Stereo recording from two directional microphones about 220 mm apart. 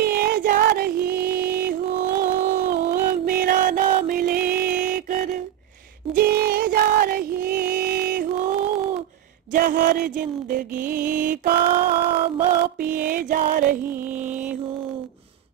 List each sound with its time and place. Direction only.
0.0 s music: 45° right (ahead or behind)
6.1 s female singing: 45° right (ahead or behind)
8.0 s music: 45° right (ahead or behind)
12.9 s music: 40° right (ahead or behind)